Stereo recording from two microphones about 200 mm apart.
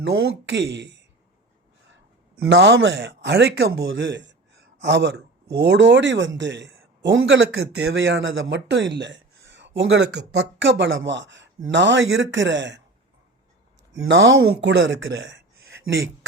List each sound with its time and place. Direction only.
0.0 s speech: 55° right (ahead or behind)
3.8 s speech: 65° right (ahead or behind)
7.6 s speech: 55° right (ahead or behind)
14.1 s speech: 70° right (ahead or behind)